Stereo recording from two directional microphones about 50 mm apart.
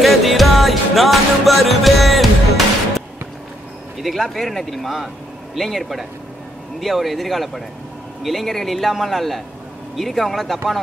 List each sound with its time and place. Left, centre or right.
0.0 s music: centre
4.0 s speech: centre